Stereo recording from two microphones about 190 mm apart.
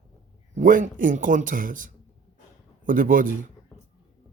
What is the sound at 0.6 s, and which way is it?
A man's voice, 45° right (ahead or behind).